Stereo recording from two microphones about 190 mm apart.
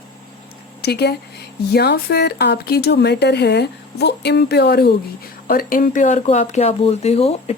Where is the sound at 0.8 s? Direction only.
60° left (ahead or behind).